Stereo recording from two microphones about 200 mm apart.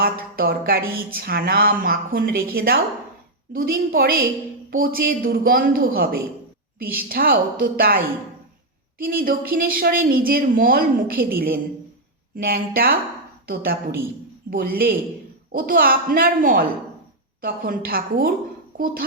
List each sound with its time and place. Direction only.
0.0 s speech: 50° right (ahead or behind)
9.0 s speech: 45° right (ahead or behind)